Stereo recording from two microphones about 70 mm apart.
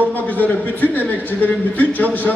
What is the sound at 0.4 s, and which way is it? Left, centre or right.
A man's voice, left.